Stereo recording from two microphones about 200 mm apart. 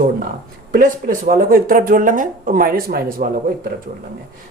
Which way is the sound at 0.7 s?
45° right (ahead or behind).